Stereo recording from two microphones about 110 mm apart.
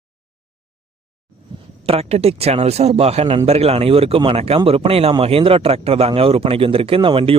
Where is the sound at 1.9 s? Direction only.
70° right (ahead or behind).